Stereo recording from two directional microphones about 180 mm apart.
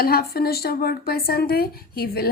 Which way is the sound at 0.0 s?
55° left (ahead or behind).